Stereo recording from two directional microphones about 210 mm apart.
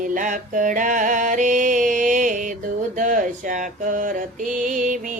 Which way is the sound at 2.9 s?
40° right (ahead or behind).